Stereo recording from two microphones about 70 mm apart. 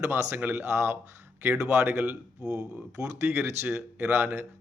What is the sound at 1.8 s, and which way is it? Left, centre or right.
Speech, right.